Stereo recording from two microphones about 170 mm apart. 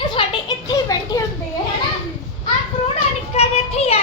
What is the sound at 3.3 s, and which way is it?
Child singing, 35° left (ahead or behind).